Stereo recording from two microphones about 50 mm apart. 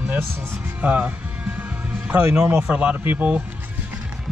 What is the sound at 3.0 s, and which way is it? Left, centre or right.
Speech, right.